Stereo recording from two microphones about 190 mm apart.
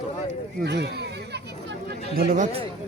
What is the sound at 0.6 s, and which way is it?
Speech, 65° right (ahead or behind).